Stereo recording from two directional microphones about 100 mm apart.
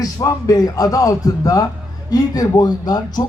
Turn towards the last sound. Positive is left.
turn(degrees=45)  # may be behind; listen again after turning